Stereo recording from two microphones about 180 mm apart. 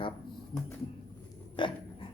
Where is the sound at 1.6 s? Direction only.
25° left (ahead or behind).